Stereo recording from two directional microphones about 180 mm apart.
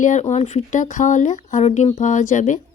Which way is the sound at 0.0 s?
40° left (ahead or behind).